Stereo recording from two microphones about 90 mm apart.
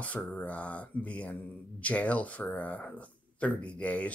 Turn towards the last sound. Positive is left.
turn(degrees=15)  # may be behind; listen again after turning